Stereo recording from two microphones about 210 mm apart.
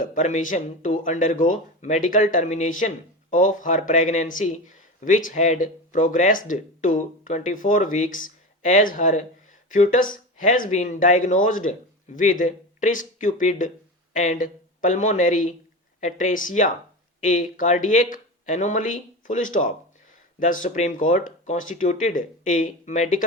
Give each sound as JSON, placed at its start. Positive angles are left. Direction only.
{"t": 0.0, "sound": "speech", "side_deg": 35}